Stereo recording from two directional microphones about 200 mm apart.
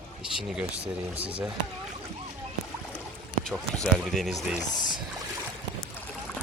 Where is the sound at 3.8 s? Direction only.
Centre (ahead or behind).